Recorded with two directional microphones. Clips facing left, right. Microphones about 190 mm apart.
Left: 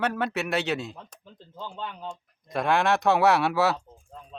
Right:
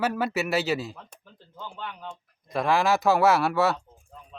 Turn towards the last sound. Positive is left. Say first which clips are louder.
# even
turn(degrees=0)  # may be behind; listen again after turning